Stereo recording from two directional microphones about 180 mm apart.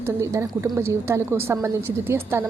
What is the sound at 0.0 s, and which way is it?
A woman's voice, 15° right (ahead or behind).